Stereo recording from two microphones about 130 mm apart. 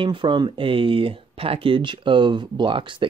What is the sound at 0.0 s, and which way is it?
Speech, 40° right (ahead or behind).